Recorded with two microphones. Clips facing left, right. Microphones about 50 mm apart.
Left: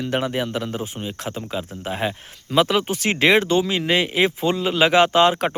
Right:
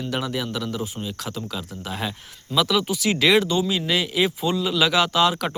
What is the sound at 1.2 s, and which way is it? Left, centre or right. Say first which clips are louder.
Speech: left 3 dB; left.